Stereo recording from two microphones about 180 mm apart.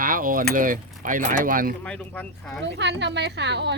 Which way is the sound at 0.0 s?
50° right (ahead or behind).